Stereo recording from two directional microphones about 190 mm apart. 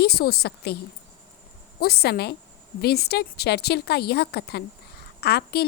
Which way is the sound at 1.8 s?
55° left (ahead or behind).